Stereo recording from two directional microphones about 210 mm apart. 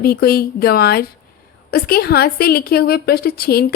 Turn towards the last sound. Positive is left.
turn(degrees=45)  # may be behind; listen again after turning